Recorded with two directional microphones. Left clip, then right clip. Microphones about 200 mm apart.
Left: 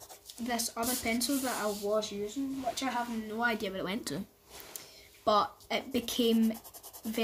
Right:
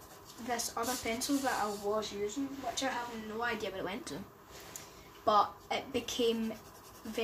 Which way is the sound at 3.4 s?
50° left (ahead or behind).